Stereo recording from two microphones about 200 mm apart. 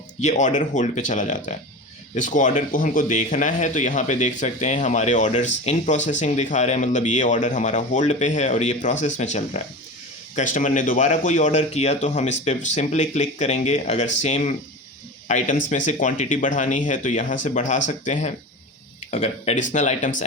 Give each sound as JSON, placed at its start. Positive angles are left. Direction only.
{"t": 0.2, "sound": "speech", "side_deg": 35}